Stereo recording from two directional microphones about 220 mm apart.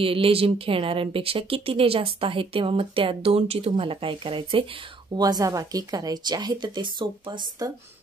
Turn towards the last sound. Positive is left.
turn(degrees=-20)  # may be behind; listen again after turning